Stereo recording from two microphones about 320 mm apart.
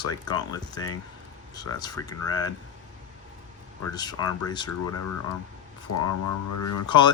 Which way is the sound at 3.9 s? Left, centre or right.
Centre.